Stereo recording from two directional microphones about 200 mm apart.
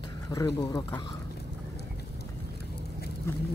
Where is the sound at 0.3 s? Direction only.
15° left (ahead or behind).